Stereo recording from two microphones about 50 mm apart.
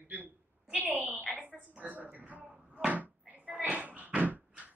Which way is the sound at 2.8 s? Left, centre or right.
Right.